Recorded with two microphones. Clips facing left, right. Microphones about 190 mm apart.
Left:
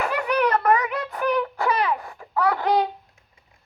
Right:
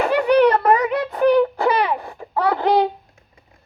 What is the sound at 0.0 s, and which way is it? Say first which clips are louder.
Child singing: right 8 dB; 30° right (ahead or behind).